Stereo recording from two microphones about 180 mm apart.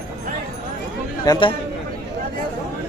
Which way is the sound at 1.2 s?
20° left (ahead or behind).